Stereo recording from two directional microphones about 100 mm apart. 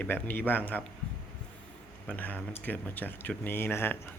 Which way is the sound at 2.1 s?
15° left (ahead or behind).